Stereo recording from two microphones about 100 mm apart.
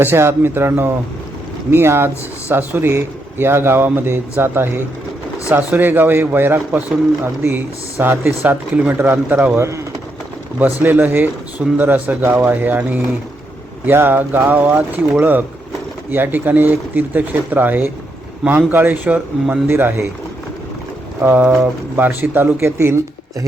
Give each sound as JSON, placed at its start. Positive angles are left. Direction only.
{"t": 0.0, "sound": "speech", "side_deg": -25}
{"t": 9.6, "sound": "speech", "side_deg": -30}
{"t": 10.8, "sound": "speech", "side_deg": -20}
{"t": 21.2, "sound": "speech", "side_deg": -15}